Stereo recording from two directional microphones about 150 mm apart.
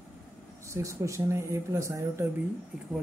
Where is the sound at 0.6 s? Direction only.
20° right (ahead or behind).